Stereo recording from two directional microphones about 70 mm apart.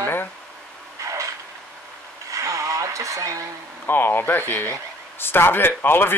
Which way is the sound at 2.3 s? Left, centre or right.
Right.